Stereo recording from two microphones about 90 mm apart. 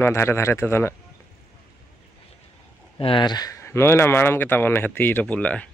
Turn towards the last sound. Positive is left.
turn(degrees=15)  # may be behind; listen again after turning